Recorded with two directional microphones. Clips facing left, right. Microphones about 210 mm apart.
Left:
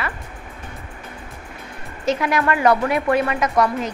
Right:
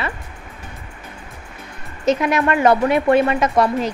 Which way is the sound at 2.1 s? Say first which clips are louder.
Right 3 dB; 20° right (ahead or behind).